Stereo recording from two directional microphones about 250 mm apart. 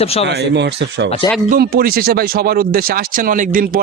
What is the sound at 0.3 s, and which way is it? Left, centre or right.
A man's voice, right.